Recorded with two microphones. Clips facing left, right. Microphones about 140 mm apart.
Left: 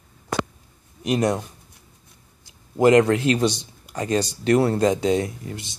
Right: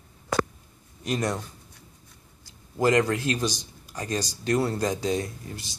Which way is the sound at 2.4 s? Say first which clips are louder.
Left 7 dB; 20° left (ahead or behind).